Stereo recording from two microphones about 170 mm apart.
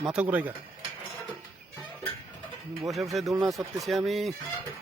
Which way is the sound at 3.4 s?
20° right (ahead or behind).